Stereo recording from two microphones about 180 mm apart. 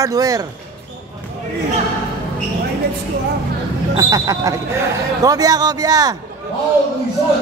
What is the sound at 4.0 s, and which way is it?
A man's voice, 20° right (ahead or behind).